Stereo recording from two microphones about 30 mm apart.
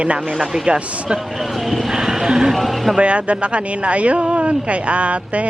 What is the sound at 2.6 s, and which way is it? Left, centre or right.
Speech, centre.